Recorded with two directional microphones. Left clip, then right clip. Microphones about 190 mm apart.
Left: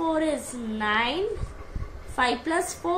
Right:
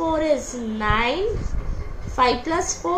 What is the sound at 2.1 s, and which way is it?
Speech, 30° left (ahead or behind).